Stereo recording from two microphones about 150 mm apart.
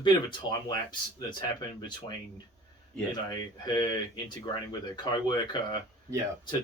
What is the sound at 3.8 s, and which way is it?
Speech, 30° left (ahead or behind).